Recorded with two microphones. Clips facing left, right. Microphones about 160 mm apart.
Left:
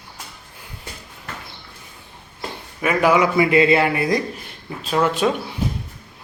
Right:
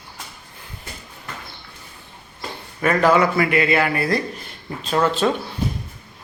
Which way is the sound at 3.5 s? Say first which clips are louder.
Left 3 dB; 25° left (ahead or behind).